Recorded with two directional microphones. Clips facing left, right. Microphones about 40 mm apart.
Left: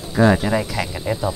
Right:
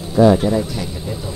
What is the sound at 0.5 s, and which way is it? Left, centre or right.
Speech, left.